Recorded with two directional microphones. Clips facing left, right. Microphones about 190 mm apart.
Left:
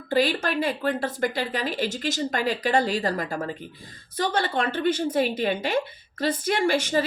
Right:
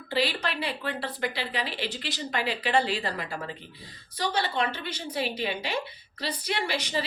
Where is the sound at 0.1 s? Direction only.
45° left (ahead or behind).